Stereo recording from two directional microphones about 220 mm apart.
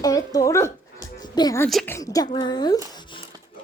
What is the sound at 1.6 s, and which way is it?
Speech, 5° left (ahead or behind).